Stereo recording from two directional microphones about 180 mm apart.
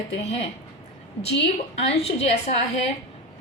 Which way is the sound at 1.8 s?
35° left (ahead or behind).